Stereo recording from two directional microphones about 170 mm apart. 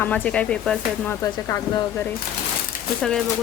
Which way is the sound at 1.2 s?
15° left (ahead or behind).